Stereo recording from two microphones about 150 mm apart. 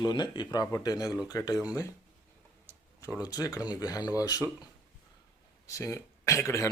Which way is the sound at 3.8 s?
25° left (ahead or behind).